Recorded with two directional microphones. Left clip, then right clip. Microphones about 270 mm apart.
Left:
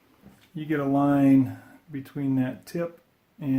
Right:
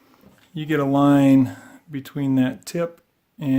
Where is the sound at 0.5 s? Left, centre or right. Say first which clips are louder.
Right 5 dB; right.